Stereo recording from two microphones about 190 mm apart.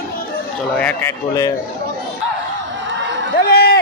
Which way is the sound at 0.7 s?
10° left (ahead or behind).